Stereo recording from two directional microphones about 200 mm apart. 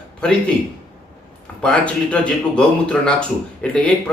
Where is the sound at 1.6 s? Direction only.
5° left (ahead or behind).